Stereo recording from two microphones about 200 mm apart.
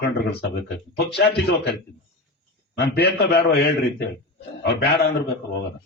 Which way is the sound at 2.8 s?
55° left (ahead or behind).